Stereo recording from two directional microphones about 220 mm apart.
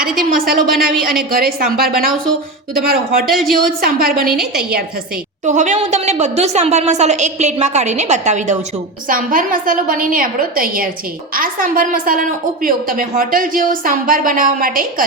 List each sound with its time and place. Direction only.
0.2 s a woman's voice: 40° right (ahead or behind)
0.9 s speech: centre (ahead or behind)
1.3 s speech: 40° right (ahead or behind)
3.2 s speech: centre (ahead or behind)
3.8 s speech: 40° right (ahead or behind)
5.5 s a woman's voice: 35° right (ahead or behind)